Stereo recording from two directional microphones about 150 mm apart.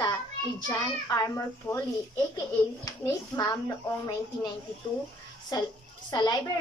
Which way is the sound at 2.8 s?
25° left (ahead or behind).